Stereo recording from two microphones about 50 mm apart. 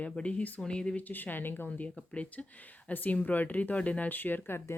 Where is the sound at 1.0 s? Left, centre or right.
Left.